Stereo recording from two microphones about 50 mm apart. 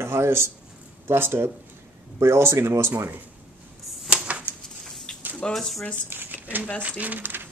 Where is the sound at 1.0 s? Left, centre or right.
Right.